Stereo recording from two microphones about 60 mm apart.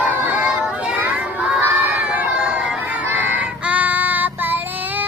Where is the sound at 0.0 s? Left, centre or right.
Right.